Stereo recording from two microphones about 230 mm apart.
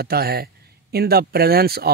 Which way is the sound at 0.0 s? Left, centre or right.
Right.